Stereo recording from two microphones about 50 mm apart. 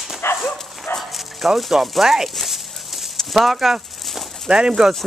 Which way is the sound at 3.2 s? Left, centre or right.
Centre.